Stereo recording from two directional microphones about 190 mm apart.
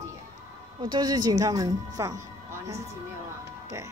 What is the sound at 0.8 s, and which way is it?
Speech, 20° right (ahead or behind).